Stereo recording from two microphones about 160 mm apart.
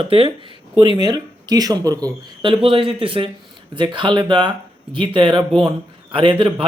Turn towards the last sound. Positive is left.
turn(degrees=-35)  # may be behind; listen again after turning